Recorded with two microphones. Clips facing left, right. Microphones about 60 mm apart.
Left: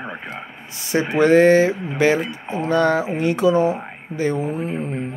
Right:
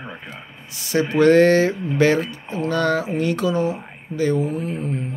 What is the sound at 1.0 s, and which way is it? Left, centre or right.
A man's voice, centre.